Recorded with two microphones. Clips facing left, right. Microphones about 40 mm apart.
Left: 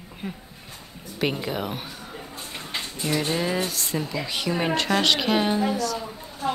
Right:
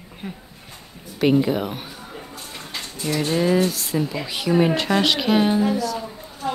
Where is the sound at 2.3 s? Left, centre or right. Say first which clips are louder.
Left 3 dB; left.